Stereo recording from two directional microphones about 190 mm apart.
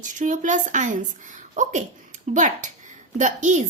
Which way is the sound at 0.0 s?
40° right (ahead or behind).